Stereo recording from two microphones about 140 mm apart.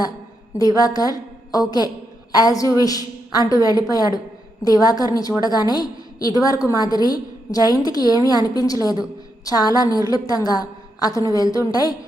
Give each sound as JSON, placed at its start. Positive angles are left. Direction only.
{"t": 0.5, "sound": "a woman's voice", "side_deg": 25}